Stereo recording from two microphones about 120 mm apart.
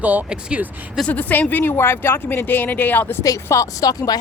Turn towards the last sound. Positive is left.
turn(degrees=30)  # may be behind; listen again after turning